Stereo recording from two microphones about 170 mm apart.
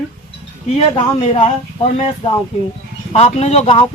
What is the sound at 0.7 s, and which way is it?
Speech, 35° left (ahead or behind).